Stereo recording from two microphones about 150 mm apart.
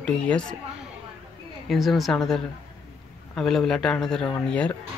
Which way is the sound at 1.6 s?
Centre (ahead or behind).